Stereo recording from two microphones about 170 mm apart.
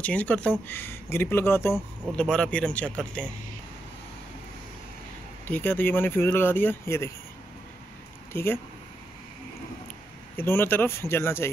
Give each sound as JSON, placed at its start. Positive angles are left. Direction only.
{"t": 0.0, "sound": "speech", "side_deg": 10}
{"t": 5.5, "sound": "speech", "side_deg": 10}
{"t": 8.3, "sound": "speech", "side_deg": 15}
{"t": 10.3, "sound": "speech", "side_deg": 15}